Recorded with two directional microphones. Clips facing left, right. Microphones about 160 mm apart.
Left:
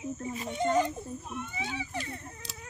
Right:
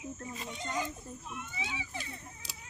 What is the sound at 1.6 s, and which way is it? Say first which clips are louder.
Speech: left 5 dB; 50° left (ahead or behind).